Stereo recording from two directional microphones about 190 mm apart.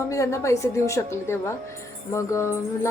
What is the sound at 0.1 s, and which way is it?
Speech, 15° left (ahead or behind).